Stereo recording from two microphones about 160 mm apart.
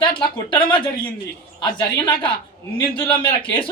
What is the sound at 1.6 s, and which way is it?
Speech, 30° left (ahead or behind).